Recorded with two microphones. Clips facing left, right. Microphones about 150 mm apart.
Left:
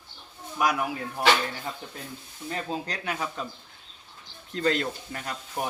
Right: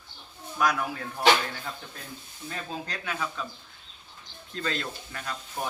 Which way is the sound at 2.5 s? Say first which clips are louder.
Left 4 dB; 30° left (ahead or behind).